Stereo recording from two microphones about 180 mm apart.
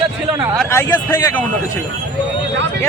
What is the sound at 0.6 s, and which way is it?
Speech, 15° left (ahead or behind).